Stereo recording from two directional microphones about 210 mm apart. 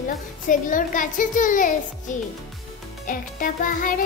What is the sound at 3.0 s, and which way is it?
Speech, 40° left (ahead or behind).